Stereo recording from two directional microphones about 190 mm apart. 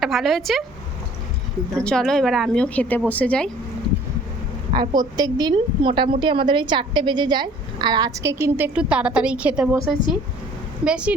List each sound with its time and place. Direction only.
0.0 s a woman's voice: centre (ahead or behind)
1.8 s a woman's voice: 5° left (ahead or behind)
4.7 s a woman's voice: 20° right (ahead or behind); by 11.1 s 5° right (ahead or behind)